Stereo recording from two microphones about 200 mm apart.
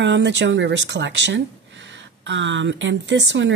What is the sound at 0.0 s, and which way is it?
A woman's voice, 60° right (ahead or behind).